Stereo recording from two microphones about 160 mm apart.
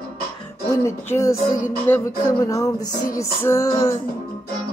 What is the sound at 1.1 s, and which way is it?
Music, 20° left (ahead or behind).